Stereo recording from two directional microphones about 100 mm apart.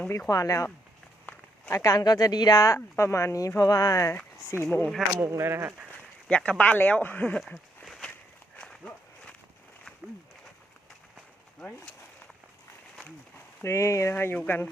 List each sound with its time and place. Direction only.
0.3 s speech: 35° left (ahead or behind)
1.7 s speech: 35° left (ahead or behind)
4.9 s speech: 5° left (ahead or behind)
5.3 s speech: 25° right (ahead or behind)
6.2 s speech: 10° left (ahead or behind)
7.3 s a sound: centre (ahead or behind)
8.5 s walk: 10° left (ahead or behind)
13.6 s speech: 30° left (ahead or behind)